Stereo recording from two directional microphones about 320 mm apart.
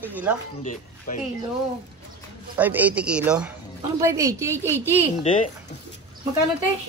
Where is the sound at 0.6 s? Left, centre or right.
Left.